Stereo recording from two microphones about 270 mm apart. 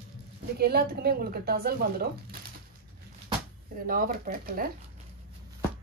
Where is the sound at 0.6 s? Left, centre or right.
Right.